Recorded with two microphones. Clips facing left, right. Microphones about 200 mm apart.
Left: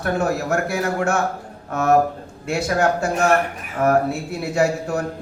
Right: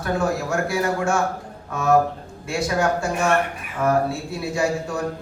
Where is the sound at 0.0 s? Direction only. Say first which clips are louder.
Left 2 dB; 65° left (ahead or behind).